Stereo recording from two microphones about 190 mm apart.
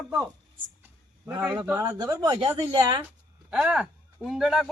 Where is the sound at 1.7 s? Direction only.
15° right (ahead or behind).